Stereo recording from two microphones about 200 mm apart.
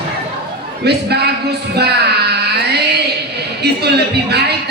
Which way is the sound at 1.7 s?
55° right (ahead or behind).